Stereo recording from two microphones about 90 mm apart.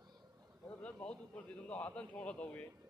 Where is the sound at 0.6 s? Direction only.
10° left (ahead or behind).